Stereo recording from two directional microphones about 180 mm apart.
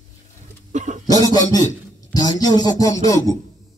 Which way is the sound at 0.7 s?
40° right (ahead or behind).